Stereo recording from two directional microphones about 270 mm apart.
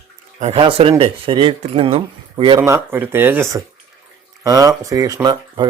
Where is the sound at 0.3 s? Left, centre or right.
Right.